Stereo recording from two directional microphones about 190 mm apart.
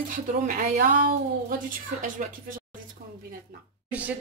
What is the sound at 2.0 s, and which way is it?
Speech, 45° right (ahead or behind).